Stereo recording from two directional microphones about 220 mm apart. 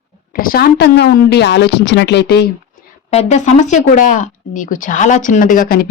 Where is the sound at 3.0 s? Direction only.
30° left (ahead or behind).